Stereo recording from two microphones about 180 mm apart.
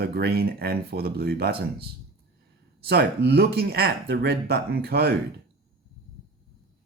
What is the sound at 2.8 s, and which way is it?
Speech, 65° right (ahead or behind).